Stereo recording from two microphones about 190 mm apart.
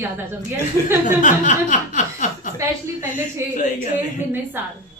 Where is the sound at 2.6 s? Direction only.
15° right (ahead or behind).